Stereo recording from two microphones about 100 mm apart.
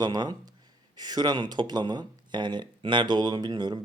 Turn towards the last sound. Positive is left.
turn(degrees=-45)  # may be behind; listen again after turning